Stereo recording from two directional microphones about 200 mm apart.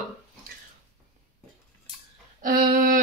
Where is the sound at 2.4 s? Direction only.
45° right (ahead or behind).